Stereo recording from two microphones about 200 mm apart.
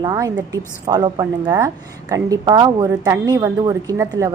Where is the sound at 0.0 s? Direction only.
20° right (ahead or behind).